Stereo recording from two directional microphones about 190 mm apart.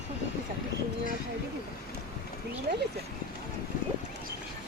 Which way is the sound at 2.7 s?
50° right (ahead or behind).